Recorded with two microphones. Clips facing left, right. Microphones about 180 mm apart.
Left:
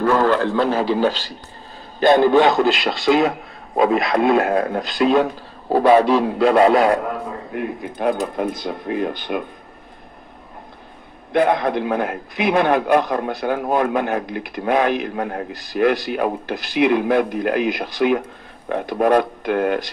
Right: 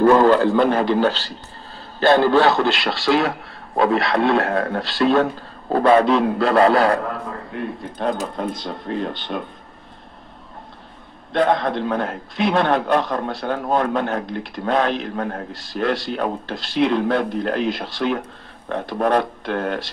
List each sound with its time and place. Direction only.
0.0 s a sound: 25° right (ahead or behind)
0.3 s speech: 5° right (ahead or behind); by 2.6 s 15° left (ahead or behind)
2.6 s a man's voice: centre (ahead or behind)
3.7 s speech: 15° left (ahead or behind)
11.3 s speech: 15° left (ahead or behind)